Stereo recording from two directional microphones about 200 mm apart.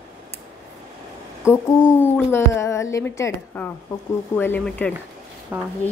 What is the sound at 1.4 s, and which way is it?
Speech, 10° left (ahead or behind).